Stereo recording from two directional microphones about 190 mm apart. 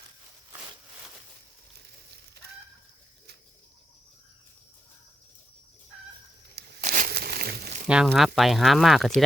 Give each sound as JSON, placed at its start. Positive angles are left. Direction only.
{"t": 6.8, "sound": "crumpling", "side_deg": -45}
{"t": 7.9, "sound": "speech", "side_deg": -5}